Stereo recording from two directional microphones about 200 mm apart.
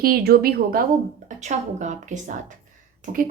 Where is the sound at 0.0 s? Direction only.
50° right (ahead or behind).